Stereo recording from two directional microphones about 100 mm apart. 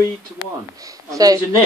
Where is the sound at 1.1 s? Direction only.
35° right (ahead or behind).